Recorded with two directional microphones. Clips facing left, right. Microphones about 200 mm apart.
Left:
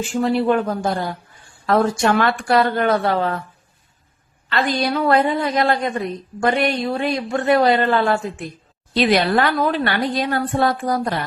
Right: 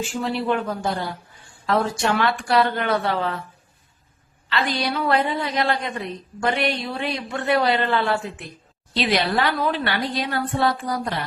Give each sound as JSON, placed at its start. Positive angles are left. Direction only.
{"t": 0.1, "sound": "a man's voice", "side_deg": 50}
{"t": 4.4, "sound": "a man's voice", "side_deg": 50}